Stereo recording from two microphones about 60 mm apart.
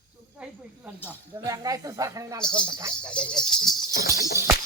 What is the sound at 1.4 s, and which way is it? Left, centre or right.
Speech, right.